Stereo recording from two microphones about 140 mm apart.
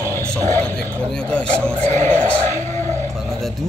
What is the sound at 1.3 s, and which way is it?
Speech, 10° left (ahead or behind).